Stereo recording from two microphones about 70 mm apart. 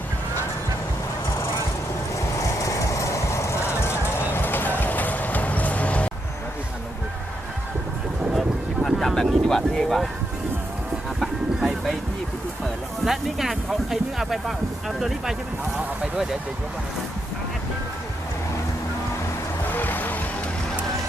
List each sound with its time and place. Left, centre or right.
2.1 s train: left; by 6.1 s centre
8.4 s vehicle: centre
11.2 s vehicle: centre
13.1 s speech: centre
19.7 s music: left